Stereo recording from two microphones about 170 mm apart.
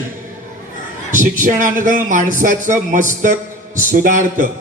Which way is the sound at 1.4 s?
50° right (ahead or behind).